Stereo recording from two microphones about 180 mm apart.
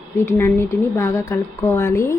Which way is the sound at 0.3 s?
15° left (ahead or behind).